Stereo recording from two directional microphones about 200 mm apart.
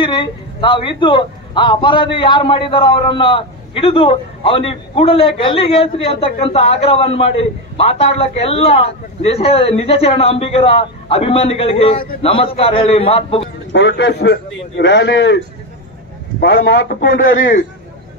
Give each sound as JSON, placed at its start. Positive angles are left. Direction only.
{"t": 0.0, "sound": "a man's voice", "side_deg": 25}
{"t": 13.7, "sound": "a man's voice", "side_deg": 60}